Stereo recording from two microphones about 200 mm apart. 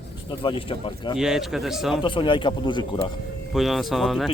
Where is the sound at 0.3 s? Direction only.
25° left (ahead or behind).